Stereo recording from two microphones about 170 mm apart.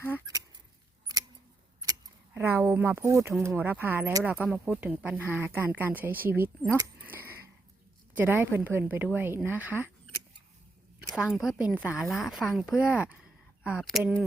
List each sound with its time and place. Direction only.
0.3 s goose: 20° right (ahead or behind)
1.8 s keys jangling: 20° right (ahead or behind)
3.4 s speech: 10° right (ahead or behind)
6.7 s a sound: 15° right (ahead or behind)
8.1 s speech: 10° right (ahead or behind)
11.1 s a woman's voice: 5° right (ahead or behind)